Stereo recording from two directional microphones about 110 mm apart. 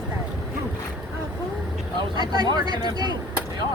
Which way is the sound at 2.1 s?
40° right (ahead or behind).